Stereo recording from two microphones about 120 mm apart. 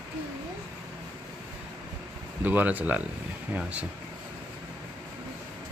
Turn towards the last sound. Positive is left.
turn(degrees=-10)  # may be behind; listen again after turning